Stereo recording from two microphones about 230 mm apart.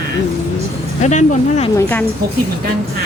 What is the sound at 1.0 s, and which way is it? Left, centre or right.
Speech, left.